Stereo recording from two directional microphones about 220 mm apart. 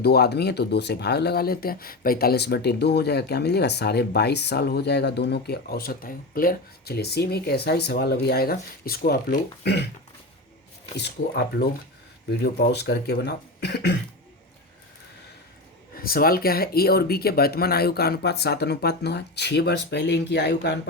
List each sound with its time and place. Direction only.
0.0 s speech: 45° left (ahead or behind)
10.9 s speech: 45° left (ahead or behind)
16.0 s speech: 40° left (ahead or behind)